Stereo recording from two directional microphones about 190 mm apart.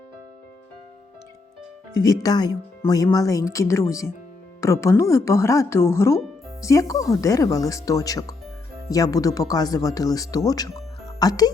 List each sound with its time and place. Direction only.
1.9 s speech: 20° left (ahead or behind)